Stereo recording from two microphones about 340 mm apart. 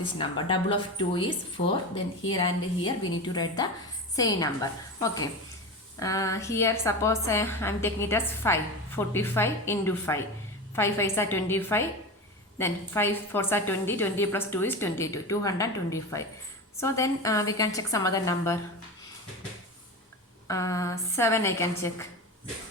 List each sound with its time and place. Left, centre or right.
0.2 s a woman's voice: centre
20.5 s a woman's voice: centre